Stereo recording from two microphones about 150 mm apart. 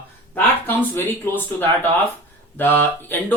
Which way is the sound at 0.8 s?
15° left (ahead or behind).